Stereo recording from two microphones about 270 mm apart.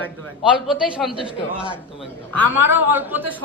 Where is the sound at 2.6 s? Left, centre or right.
Centre.